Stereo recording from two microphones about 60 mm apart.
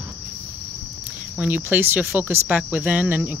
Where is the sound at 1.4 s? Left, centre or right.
Right.